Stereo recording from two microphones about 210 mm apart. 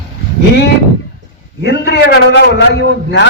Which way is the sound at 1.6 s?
50° left (ahead or behind).